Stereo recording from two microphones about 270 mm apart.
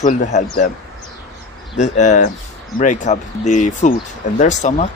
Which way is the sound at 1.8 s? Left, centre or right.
Left.